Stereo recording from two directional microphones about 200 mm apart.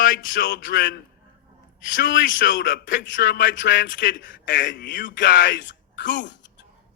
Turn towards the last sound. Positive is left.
turn(degrees=65)  # may be behind; listen again after turning